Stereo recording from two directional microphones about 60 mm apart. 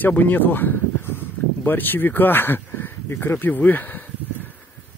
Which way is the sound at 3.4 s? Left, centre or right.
Left.